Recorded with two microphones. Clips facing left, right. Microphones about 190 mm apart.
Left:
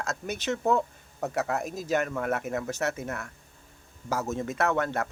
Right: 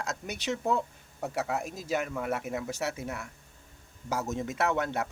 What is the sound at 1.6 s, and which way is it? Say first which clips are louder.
Speech: left 5 dB; 45° left (ahead or behind).